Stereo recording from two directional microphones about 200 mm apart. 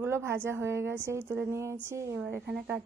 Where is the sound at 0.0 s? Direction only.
10° right (ahead or behind).